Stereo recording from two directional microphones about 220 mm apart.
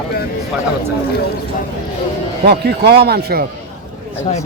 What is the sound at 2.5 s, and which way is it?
Speech, 50° right (ahead or behind).